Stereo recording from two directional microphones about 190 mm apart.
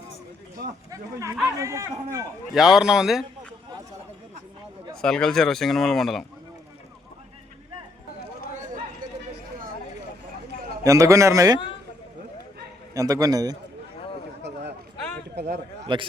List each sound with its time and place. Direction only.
0.9 s speech: 15° right (ahead or behind)
2.5 s speech: centre (ahead or behind)
4.9 s speech: 5° left (ahead or behind)
8.2 s chatter: 55° right (ahead or behind)
10.8 s speech: 15° right (ahead or behind)
12.9 s a man's voice: 20° right (ahead or behind)
15.4 s a man's voice: 60° right (ahead or behind)
15.8 s a man's voice: 25° right (ahead or behind)